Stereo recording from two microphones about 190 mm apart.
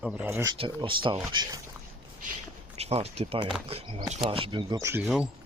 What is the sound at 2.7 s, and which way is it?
Speech, 35° right (ahead or behind).